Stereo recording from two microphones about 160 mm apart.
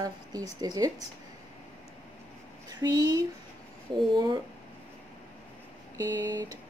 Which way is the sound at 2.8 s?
25° right (ahead or behind).